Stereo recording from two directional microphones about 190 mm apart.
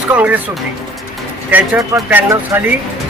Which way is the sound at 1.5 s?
15° right (ahead or behind).